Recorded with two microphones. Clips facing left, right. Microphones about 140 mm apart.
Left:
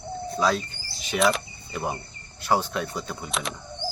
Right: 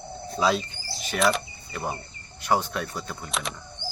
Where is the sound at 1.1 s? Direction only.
Centre (ahead or behind).